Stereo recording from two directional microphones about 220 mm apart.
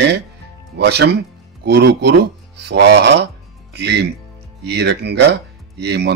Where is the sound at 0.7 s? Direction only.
50° right (ahead or behind).